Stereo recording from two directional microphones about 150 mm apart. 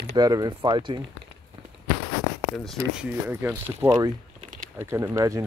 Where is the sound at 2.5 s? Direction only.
Centre (ahead or behind).